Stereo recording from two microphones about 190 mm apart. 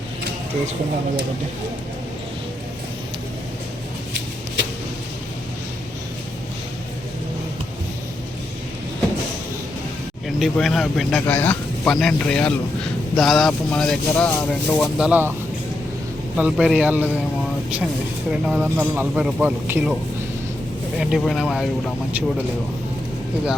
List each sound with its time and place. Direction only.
10.2 s speech: centre (ahead or behind)
16.4 s speech: 5° right (ahead or behind)
18.3 s speech: 5° right (ahead or behind)
21.0 s speech: centre (ahead or behind)